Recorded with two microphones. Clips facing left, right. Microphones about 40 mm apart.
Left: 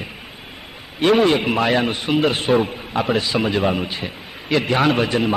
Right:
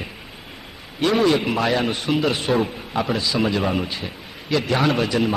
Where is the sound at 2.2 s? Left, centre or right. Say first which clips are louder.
Left 5 dB; left.